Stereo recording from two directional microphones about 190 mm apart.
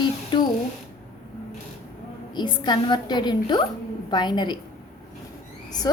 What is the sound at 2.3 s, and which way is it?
A woman's voice, 25° left (ahead or behind).